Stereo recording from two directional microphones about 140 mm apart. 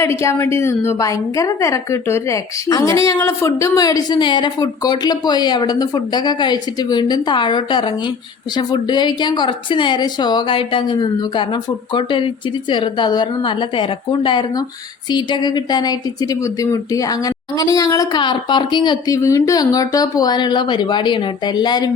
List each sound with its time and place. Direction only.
0.0 s a woman's voice: 20° left (ahead or behind)